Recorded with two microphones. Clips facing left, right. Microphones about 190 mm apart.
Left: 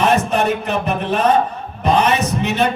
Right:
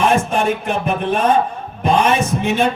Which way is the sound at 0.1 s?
50° right (ahead or behind).